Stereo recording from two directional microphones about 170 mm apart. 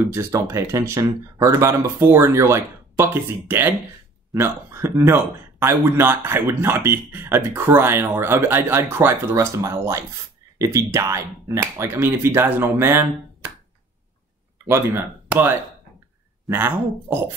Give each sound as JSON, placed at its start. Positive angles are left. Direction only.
{"t": 0.1, "sound": "a man's voice", "side_deg": -15}
{"t": 14.7, "sound": "a man's voice", "side_deg": -10}